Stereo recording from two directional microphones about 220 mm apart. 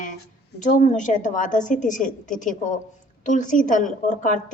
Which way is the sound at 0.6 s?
35° left (ahead or behind).